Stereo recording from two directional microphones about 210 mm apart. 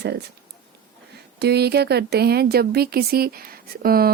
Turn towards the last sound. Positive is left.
turn(degrees=-45)  # may be behind; listen again after turning